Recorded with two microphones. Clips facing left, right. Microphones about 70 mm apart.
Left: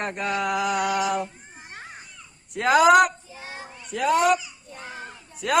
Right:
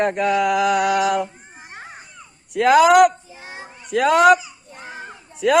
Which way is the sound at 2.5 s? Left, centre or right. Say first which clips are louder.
Right 5 dB; right.